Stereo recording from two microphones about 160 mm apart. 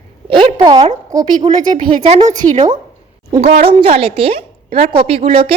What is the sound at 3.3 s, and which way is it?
A woman's voice, 40° right (ahead or behind).